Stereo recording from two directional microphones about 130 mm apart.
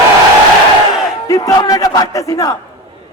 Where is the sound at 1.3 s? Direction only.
25° left (ahead or behind).